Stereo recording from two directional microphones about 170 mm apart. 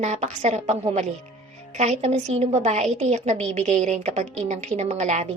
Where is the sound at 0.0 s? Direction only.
40° right (ahead or behind).